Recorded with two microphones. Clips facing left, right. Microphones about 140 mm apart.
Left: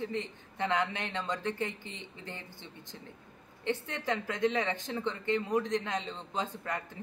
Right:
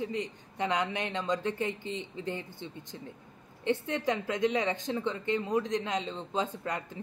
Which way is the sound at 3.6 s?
20° right (ahead or behind).